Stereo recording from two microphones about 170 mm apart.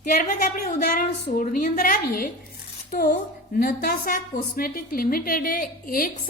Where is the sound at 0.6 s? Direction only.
50° left (ahead or behind).